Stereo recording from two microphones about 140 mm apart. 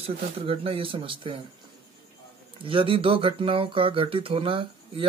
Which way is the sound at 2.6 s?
40° right (ahead or behind).